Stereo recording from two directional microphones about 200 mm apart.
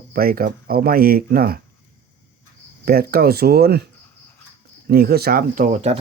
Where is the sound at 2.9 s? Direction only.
50° right (ahead or behind).